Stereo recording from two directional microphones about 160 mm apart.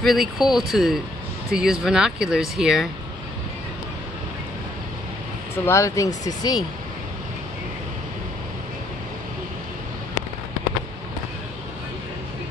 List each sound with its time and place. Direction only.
0.0 s speech: centre (ahead or behind)
5.7 s speech: 20° left (ahead or behind)